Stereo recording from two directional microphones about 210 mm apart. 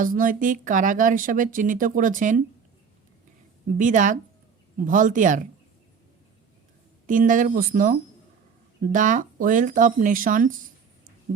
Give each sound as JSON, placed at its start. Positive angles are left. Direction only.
{"t": 0.0, "sound": "speech", "side_deg": -40}
{"t": 3.8, "sound": "speech", "side_deg": -40}
{"t": 7.1, "sound": "speech", "side_deg": -40}